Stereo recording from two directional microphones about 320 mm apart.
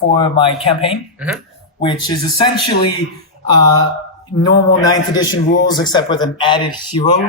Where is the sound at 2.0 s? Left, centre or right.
Centre.